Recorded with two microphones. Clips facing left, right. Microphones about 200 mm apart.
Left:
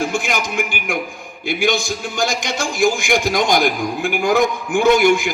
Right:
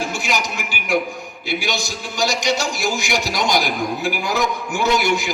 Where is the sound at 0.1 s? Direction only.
50° left (ahead or behind).